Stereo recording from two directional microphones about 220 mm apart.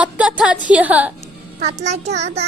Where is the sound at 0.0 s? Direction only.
5° right (ahead or behind).